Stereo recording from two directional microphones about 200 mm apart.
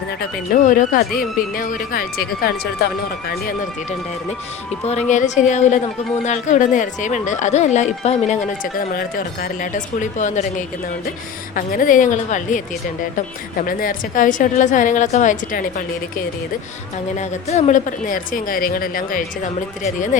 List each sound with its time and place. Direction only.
0.5 s speech: 40° left (ahead or behind)
4.9 s speech: 35° left (ahead or behind)
11.5 s speech: 45° left (ahead or behind)
17.2 s speech: 35° left (ahead or behind)